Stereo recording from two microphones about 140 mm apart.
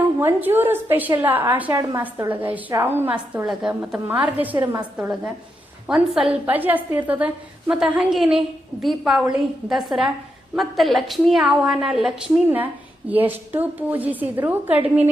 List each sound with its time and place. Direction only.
0.2 s a woman's voice: 15° right (ahead or behind)
4.5 s a woman's voice: 25° right (ahead or behind)
4.8 s a woman's voice: 10° right (ahead or behind)